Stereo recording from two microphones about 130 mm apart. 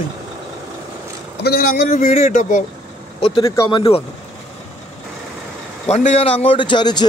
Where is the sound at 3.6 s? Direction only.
40° left (ahead or behind).